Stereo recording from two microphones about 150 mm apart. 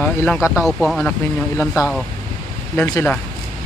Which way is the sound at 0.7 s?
Centre (ahead or behind).